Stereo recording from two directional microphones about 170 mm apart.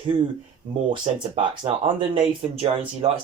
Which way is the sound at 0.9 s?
30° right (ahead or behind).